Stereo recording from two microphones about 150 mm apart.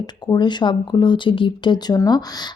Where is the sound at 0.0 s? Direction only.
30° left (ahead or behind).